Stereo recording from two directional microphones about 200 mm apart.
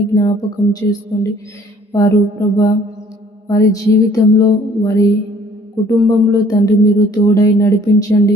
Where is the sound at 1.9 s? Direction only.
15° left (ahead or behind).